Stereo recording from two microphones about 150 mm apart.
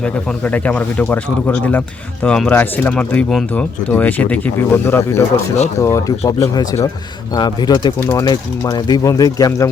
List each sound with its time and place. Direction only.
0.0 s speech: 10° left (ahead or behind); by 9.6 s 25° left (ahead or behind)